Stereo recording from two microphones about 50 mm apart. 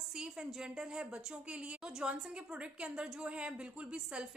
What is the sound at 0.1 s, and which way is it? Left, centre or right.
A woman's voice, centre.